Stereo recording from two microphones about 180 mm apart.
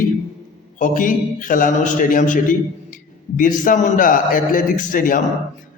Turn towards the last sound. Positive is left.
turn(degrees=50)  # may be behind; listen again after turning